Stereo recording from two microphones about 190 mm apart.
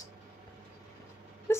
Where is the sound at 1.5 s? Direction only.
15° left (ahead or behind).